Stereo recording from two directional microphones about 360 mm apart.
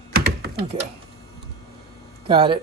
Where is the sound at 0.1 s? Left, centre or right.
Right.